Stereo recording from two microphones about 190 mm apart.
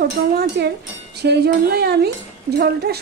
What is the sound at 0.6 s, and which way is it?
Speech, 60° right (ahead or behind).